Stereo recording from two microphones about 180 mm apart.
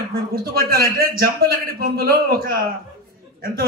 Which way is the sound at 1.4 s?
55° right (ahead or behind).